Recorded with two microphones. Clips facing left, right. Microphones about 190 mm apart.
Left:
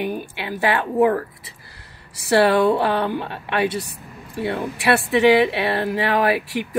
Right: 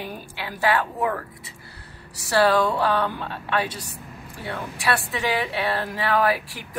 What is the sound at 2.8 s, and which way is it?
Speech, 20° left (ahead or behind).